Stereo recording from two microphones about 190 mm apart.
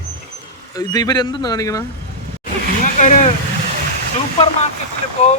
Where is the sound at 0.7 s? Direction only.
20° left (ahead or behind).